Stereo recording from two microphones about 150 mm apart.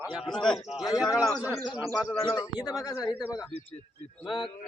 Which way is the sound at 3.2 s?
5° right (ahead or behind).